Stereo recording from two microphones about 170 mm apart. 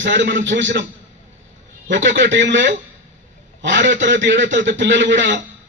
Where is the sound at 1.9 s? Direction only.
90° right.